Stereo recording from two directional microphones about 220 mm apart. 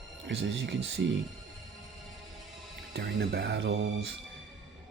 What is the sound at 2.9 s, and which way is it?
Speech, 55° right (ahead or behind).